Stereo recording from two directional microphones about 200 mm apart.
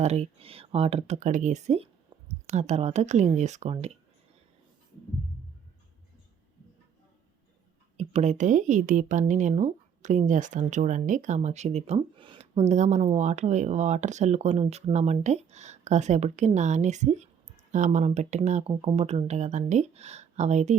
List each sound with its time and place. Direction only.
0.0 s a woman's voice: 35° right (ahead or behind)
7.9 s a woman's voice: 35° right (ahead or behind)